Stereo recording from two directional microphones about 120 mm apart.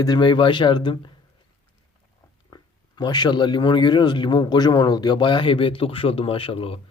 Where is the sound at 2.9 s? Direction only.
35° left (ahead or behind).